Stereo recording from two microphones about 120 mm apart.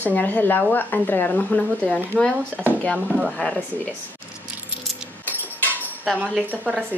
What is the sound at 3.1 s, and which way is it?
Speech, centre (ahead or behind).